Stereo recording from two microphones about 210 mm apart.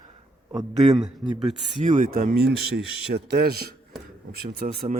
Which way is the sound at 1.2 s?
Centre (ahead or behind).